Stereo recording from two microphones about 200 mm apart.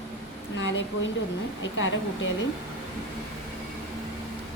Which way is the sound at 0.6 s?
65° left (ahead or behind).